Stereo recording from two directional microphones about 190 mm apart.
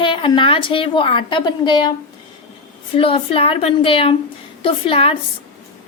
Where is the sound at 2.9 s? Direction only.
30° left (ahead or behind).